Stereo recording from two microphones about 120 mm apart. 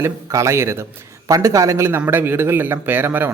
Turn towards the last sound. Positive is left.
turn(degrees=-15)  # may be behind; listen again after turning